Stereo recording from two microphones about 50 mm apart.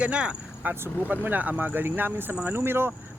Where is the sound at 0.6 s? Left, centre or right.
Right.